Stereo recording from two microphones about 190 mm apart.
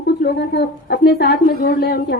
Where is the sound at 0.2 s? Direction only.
55° left (ahead or behind).